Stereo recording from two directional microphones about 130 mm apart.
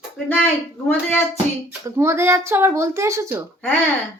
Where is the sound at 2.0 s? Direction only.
20° right (ahead or behind).